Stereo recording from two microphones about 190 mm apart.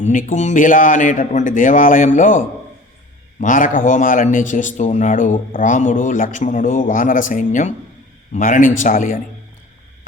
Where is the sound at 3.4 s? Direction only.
45° left (ahead or behind).